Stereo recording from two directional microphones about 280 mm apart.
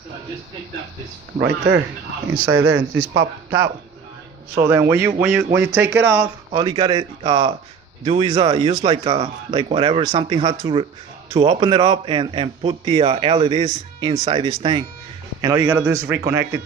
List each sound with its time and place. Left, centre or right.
1.4 s speech: right
4.5 s a man's voice: centre